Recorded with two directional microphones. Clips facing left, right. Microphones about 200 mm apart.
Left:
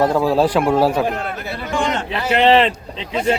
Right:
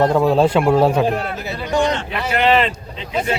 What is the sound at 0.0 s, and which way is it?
Speech, centre (ahead or behind).